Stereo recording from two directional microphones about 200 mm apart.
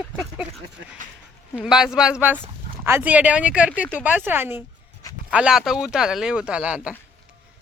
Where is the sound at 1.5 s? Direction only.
Centre (ahead or behind).